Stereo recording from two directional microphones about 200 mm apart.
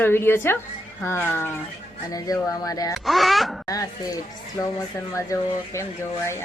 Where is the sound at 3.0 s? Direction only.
Centre (ahead or behind).